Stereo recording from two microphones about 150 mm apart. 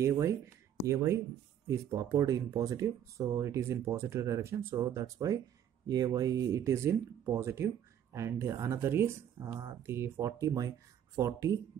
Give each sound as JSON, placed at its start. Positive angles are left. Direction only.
{"t": 0.0, "sound": "speech", "side_deg": -20}